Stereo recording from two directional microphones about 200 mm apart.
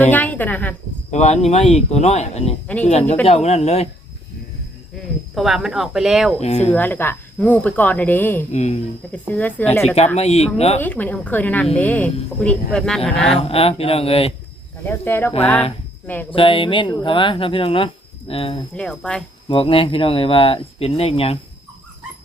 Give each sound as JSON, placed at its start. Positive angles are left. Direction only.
{"t": 0.0, "sound": "speech", "side_deg": 10}
{"t": 1.1, "sound": "speech", "side_deg": 35}
{"t": 5.3, "sound": "speech", "side_deg": 0}
{"t": 6.4, "sound": "speech", "side_deg": 35}
{"t": 6.7, "sound": "speech", "side_deg": 10}
{"t": 8.5, "sound": "speech", "side_deg": 35}
{"t": 9.1, "sound": "speech", "side_deg": 10}
{"t": 10.2, "sound": "speech", "side_deg": 30}
{"t": 10.8, "sound": "speech", "side_deg": 10}
{"t": 13.5, "sound": "speech", "side_deg": 30}
{"t": 14.8, "sound": "speech", "side_deg": 10}
{"t": 16.3, "sound": "speech", "side_deg": 25}
{"t": 18.8, "sound": "speech", "side_deg": 5}
{"t": 19.5, "sound": "speech", "side_deg": 25}